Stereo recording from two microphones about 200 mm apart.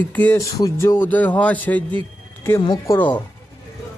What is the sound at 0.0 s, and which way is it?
A man's voice, 10° left (ahead or behind).